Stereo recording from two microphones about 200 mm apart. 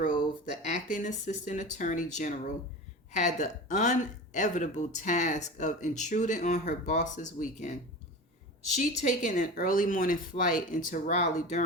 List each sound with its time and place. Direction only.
0.7 s speech: 40° left (ahead or behind)